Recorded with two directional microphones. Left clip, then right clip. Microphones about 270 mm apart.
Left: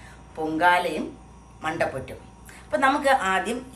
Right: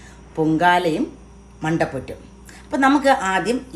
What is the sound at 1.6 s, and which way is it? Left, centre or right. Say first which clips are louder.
Speech: right 4 dB; right.